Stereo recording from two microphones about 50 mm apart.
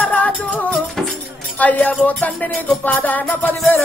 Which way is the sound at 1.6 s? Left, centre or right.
Left.